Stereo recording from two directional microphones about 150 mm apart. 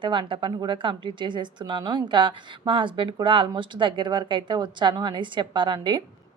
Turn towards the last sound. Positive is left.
turn(degrees=-30)  # may be behind; listen again after turning